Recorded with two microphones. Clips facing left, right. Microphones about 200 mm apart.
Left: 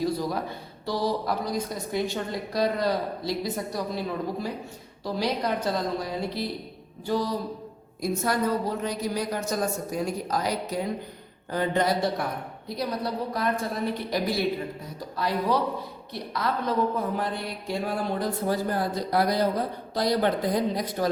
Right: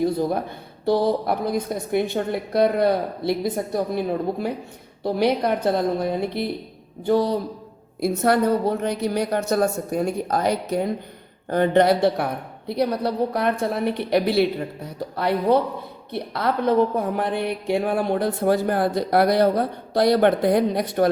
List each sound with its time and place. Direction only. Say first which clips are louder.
0.0 s speech: right 5 dB; 55° right (ahead or behind)